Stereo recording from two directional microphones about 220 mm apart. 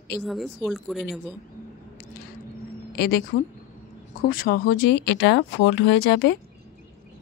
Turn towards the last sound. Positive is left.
turn(degrees=45)  # may be behind; listen again after turning